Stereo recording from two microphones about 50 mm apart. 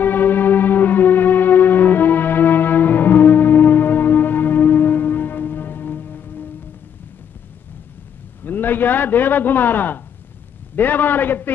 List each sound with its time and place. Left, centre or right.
0.0 s music: left
8.5 s a man's voice: left